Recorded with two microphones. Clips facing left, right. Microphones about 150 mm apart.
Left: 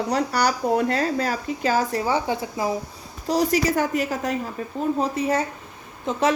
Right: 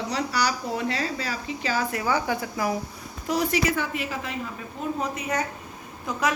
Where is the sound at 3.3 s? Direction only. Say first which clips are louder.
Left 4 dB; 35° left (ahead or behind).